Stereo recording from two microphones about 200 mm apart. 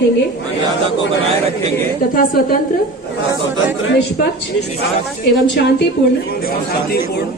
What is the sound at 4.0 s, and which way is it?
A woman's voice, 55° left (ahead or behind).